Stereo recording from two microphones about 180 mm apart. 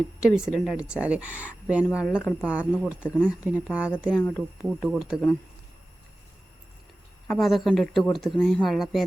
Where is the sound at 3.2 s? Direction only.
10° right (ahead or behind).